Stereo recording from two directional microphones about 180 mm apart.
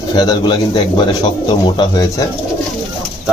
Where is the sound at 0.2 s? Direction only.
25° left (ahead or behind).